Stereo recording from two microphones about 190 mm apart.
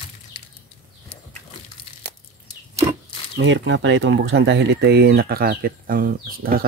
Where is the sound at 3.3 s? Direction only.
75° right (ahead or behind); by 6.7 s 50° right (ahead or behind).